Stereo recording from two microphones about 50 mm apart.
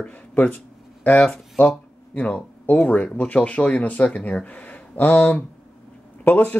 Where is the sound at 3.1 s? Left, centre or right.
Left.